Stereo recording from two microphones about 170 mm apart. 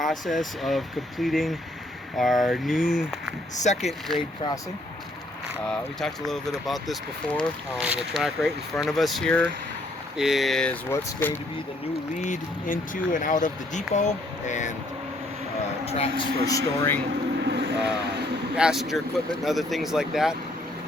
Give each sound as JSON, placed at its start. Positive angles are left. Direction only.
{"t": 0.0, "sound": "speech", "side_deg": 0}
{"t": 3.6, "sound": "speech", "side_deg": 40}
{"t": 5.6, "sound": "speech", "side_deg": 0}
{"t": 12.2, "sound": "speech", "side_deg": 50}
{"t": 15.9, "sound": "speech", "side_deg": 35}
{"t": 16.5, "sound": "speech", "side_deg": 15}
{"t": 17.4, "sound": "speech", "side_deg": -80}
{"t": 18.5, "sound": "speech", "side_deg": -5}